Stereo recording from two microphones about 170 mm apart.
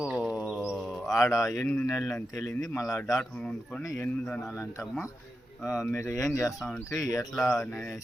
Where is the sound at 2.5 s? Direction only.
15° left (ahead or behind).